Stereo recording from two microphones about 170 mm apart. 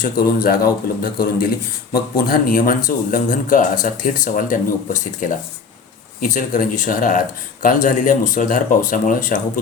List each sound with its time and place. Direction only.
0.0 s a man's voice: 60° left (ahead or behind)